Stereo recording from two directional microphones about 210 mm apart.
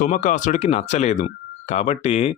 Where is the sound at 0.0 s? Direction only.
35° left (ahead or behind).